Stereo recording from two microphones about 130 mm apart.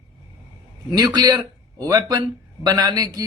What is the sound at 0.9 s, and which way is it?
A man's voice, 30° right (ahead or behind).